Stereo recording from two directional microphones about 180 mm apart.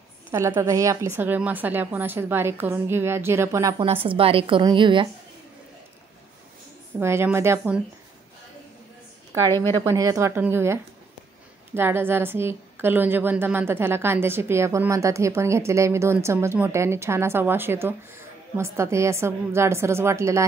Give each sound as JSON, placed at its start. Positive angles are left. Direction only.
{"t": 0.3, "sound": "a woman's voice", "side_deg": -15}
{"t": 3.7, "sound": "a woman's voice", "side_deg": -30}
{"t": 7.0, "sound": "a woman's voice", "side_deg": -15}
{"t": 9.5, "sound": "a woman's voice", "side_deg": 15}
{"t": 9.8, "sound": "a woman's voice", "side_deg": -20}